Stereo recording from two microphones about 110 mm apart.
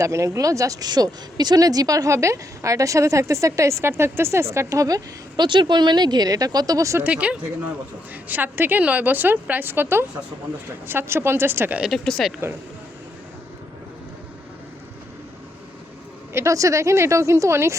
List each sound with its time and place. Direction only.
0.0 s speech: 30° right (ahead or behind)
5.5 s speech: 45° right (ahead or behind)
7.0 s a woman's voice: 10° right (ahead or behind)
11.8 s speech: 5° left (ahead or behind)
16.3 s speech: 25° right (ahead or behind)